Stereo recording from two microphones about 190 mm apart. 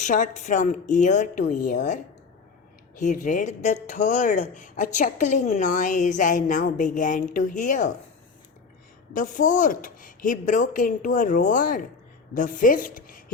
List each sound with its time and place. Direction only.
0.0 s a woman's voice: 40° left (ahead or behind)
9.1 s a woman's voice: 45° left (ahead or behind)